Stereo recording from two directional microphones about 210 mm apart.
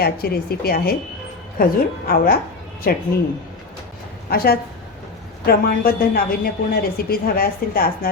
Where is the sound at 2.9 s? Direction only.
45° left (ahead or behind).